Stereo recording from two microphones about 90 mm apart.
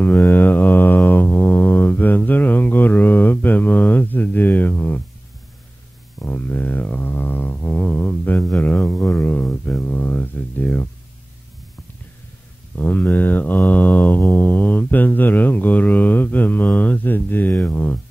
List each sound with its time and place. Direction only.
0.0 s mantra: 20° left (ahead or behind)
6.1 s a sound: 20° left (ahead or behind)
12.7 s mantra: 20° left (ahead or behind)